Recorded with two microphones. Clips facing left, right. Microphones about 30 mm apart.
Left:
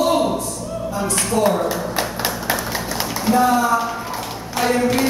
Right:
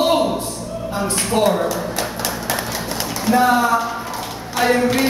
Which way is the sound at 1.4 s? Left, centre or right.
Right.